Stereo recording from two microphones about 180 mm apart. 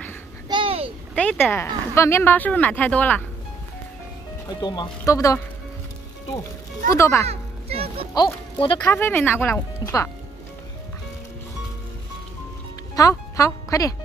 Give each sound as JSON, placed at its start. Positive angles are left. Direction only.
{"t": 0.5, "sound": "a sound", "side_deg": -30}
{"t": 1.1, "sound": "speech", "side_deg": 10}
{"t": 4.6, "sound": "speech", "side_deg": 25}
{"t": 6.9, "sound": "speech", "side_deg": 15}
{"t": 7.2, "sound": "a sound", "side_deg": -35}
{"t": 8.1, "sound": "speech", "side_deg": 20}
{"t": 8.8, "sound": "speech", "side_deg": 10}
{"t": 12.9, "sound": "speech", "side_deg": 20}